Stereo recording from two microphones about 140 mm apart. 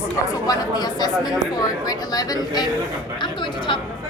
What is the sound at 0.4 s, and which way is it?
Speech, 25° left (ahead or behind).